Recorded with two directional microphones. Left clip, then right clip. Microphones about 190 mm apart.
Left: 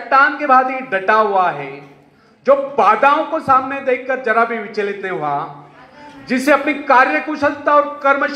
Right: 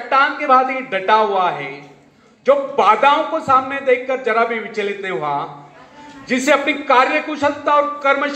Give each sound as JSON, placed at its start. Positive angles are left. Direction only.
{"t": 0.1, "sound": "a man's voice", "side_deg": 45}